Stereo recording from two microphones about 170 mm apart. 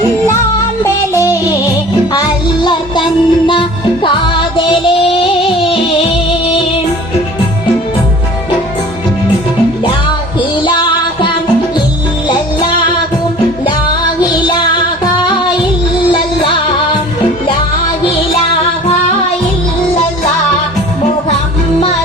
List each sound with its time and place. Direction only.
2.1 s music: 25° left (ahead or behind)
10.6 s music: 25° left (ahead or behind)
14.4 s music: 25° left (ahead or behind)